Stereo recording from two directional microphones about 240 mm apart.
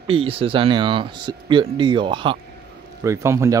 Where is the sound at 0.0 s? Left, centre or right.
Right.